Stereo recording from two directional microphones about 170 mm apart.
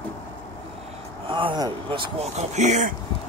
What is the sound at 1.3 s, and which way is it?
Speech, 30° right (ahead or behind).